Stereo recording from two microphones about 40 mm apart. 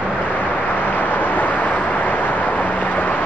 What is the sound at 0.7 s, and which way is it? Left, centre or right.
Vehicle, left.